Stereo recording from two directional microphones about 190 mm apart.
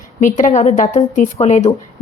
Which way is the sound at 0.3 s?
40° left (ahead or behind).